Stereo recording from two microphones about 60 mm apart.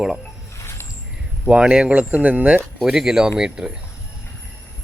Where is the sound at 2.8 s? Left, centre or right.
Centre.